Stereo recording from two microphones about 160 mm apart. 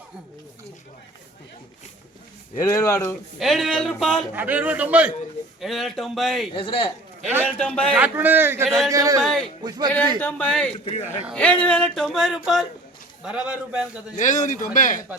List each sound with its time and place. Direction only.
2.6 s speech: 20° left (ahead or behind)
3.3 s speech: centre (ahead or behind)
4.4 s a man's voice: 10° right (ahead or behind)
6.5 s a man's voice: 30° left (ahead or behind)
7.4 s speech: 5° left (ahead or behind)
7.9 s a man's voice: 10° right (ahead or behind)
9.2 s speech: 5° left (ahead or behind)
9.6 s a man's voice: 25° right (ahead or behind)
10.2 s a man's voice: 10° left (ahead or behind)
10.8 s speech: 40° left (ahead or behind)
11.3 s a man's voice: 5° left (ahead or behind); by 14.0 s 10° right (ahead or behind)
14.2 s speech: 50° left (ahead or behind)